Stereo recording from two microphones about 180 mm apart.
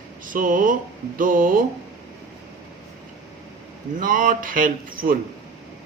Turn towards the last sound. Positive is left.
turn(degrees=-50)  # may be behind; listen again after turning